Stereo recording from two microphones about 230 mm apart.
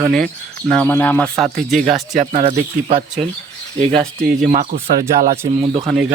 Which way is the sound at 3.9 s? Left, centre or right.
Centre.